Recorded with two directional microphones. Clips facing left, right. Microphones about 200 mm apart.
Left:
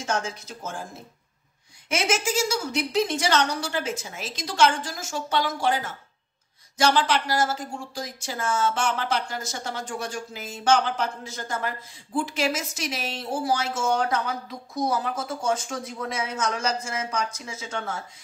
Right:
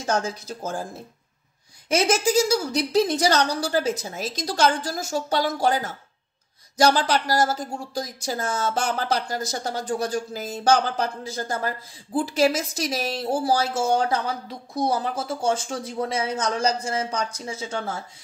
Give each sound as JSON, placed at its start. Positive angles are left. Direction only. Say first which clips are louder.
{"t": 0.0, "sound": "a woman's voice", "louder": "right 3 dB", "side_deg": -35}
{"t": 1.9, "sound": "a woman's voice", "louder": "right 5 dB", "side_deg": -35}